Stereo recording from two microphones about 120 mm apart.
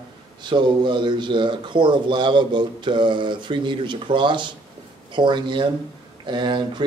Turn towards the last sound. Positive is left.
turn(degrees=-40)  # may be behind; listen again after turning